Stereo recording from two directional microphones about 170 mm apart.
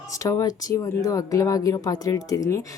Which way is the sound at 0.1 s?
20° left (ahead or behind).